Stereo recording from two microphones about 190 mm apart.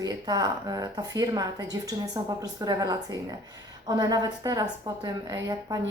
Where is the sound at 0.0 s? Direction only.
20° right (ahead or behind).